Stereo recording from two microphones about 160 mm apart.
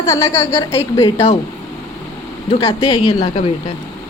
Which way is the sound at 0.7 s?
35° left (ahead or behind).